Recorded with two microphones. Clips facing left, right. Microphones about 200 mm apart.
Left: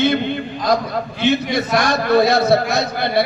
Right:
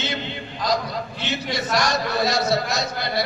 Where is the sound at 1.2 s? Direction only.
55° left (ahead or behind).